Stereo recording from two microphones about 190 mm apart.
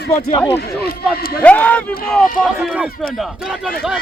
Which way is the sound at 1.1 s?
55° left (ahead or behind).